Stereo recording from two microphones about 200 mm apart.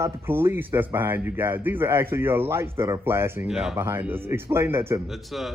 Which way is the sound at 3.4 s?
Centre (ahead or behind).